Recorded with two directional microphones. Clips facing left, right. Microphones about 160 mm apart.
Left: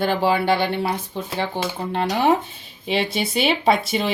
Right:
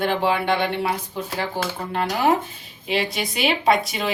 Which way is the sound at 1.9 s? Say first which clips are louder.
Left 1 dB; 30° left (ahead or behind).